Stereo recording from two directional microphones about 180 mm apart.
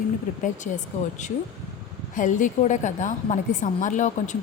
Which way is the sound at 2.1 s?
45° left (ahead or behind).